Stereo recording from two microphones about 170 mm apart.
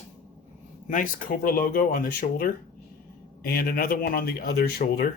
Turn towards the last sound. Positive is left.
turn(degrees=65)  # may be behind; listen again after turning